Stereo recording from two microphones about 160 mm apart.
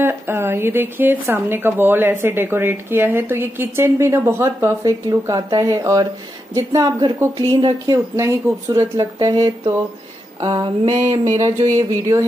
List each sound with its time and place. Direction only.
0.0 s a woman's voice: 15° right (ahead or behind)
11.0 s speech: 45° right (ahead or behind)
11.3 s a woman's voice: 20° right (ahead or behind)